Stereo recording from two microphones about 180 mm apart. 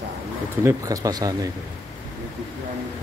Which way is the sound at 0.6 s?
20° right (ahead or behind).